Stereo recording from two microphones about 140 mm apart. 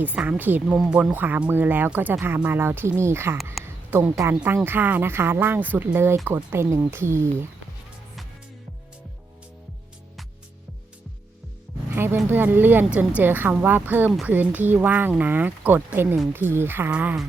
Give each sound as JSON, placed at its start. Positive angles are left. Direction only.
{"t": 0.0, "sound": "speech", "side_deg": -10}
{"t": 3.6, "sound": "a sound", "side_deg": 0}
{"t": 3.9, "sound": "speech", "side_deg": -15}
{"t": 11.9, "sound": "speech", "side_deg": -15}